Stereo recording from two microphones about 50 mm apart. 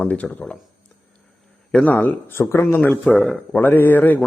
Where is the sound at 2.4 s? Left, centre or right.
Left.